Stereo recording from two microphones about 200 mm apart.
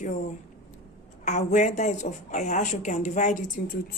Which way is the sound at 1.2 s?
35° left (ahead or behind).